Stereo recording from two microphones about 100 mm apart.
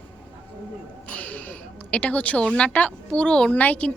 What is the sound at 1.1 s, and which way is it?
A woman's voice, 15° left (ahead or behind).